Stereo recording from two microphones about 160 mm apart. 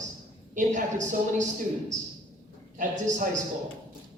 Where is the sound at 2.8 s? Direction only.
55° right (ahead or behind).